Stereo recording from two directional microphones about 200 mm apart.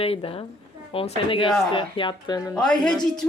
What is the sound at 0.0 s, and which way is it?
Speech, 30° left (ahead or behind).